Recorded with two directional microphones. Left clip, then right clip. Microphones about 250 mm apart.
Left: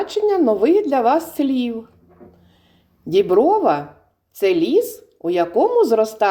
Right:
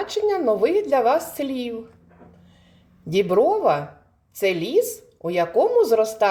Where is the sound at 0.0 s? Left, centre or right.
Left.